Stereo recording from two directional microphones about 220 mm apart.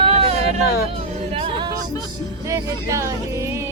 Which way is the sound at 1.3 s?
25° right (ahead or behind).